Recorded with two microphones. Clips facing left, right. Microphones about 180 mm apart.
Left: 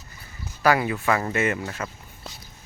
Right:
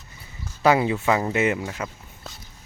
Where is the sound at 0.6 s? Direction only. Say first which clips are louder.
Right 2 dB; 20° right (ahead or behind).